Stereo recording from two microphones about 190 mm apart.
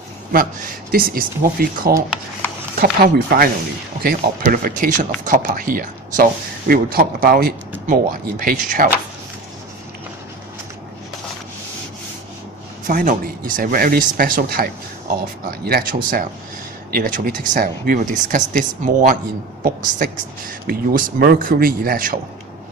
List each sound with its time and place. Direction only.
0.9 s speech: 50° right (ahead or behind)
3.0 s speech: 50° right (ahead or behind)
12.9 s speech: 50° right (ahead or behind)